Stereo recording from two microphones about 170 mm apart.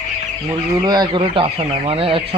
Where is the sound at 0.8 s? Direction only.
25° right (ahead or behind).